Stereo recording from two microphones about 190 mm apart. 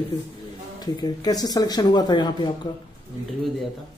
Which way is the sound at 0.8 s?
20° left (ahead or behind).